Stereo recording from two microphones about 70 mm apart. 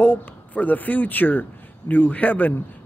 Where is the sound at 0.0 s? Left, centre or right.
Centre.